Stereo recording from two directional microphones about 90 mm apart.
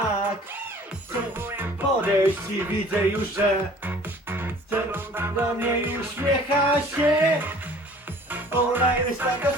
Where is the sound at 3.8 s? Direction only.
20° right (ahead or behind).